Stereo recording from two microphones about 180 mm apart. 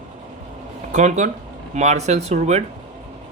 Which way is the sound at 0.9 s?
40° right (ahead or behind).